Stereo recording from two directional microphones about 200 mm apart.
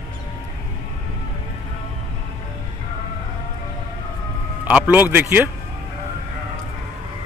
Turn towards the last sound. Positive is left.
turn(degrees=-10)  # may be behind; listen again after turning